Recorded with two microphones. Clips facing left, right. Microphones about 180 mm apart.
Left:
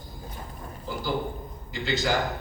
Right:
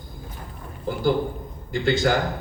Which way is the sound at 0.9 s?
50° right (ahead or behind).